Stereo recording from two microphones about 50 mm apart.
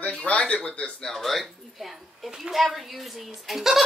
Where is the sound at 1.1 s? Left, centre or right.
Centre.